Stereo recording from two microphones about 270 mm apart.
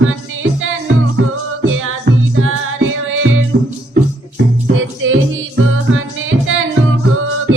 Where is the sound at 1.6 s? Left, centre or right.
Right.